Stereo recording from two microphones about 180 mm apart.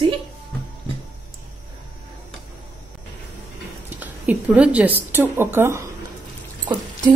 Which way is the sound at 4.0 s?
10° right (ahead or behind).